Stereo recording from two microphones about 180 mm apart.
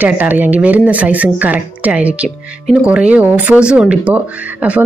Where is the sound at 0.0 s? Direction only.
10° right (ahead or behind).